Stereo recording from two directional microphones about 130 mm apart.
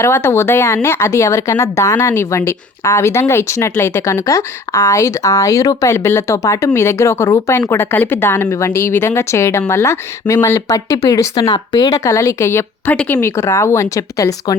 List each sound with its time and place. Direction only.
0.0 s speech: 20° left (ahead or behind)